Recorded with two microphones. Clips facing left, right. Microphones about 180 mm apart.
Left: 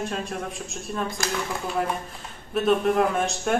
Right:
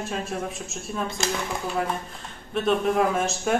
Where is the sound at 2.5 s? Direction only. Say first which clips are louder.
Left 2 dB; centre (ahead or behind).